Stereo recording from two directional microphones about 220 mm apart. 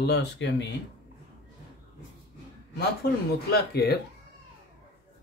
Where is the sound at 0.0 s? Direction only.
50° left (ahead or behind).